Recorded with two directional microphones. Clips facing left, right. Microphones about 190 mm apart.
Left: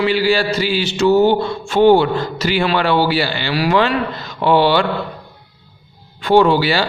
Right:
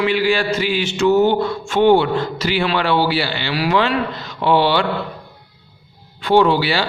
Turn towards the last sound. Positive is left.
turn(degrees=45)  # may be behind; listen again after turning